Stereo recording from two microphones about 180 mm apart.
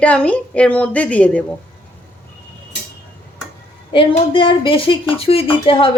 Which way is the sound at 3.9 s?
30° left (ahead or behind).